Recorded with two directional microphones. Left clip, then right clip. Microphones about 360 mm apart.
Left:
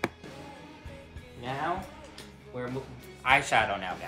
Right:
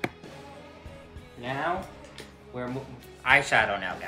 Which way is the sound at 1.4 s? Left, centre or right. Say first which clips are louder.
Right 2 dB; centre.